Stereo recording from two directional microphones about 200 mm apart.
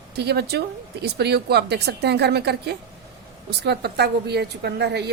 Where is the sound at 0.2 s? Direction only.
55° right (ahead or behind).